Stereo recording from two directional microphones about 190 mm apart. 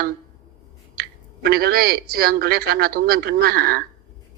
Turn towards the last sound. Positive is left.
turn(degrees=-55)  # may be behind; listen again after turning